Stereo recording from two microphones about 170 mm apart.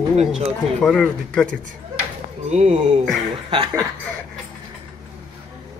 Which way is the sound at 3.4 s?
30° right (ahead or behind).